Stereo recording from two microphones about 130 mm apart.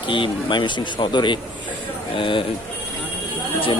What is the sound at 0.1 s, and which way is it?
Speech, 40° left (ahead or behind).